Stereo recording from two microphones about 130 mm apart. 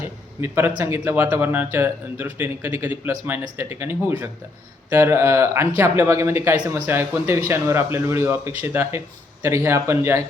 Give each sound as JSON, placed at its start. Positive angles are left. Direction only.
{"t": 0.4, "sound": "speech", "side_deg": -15}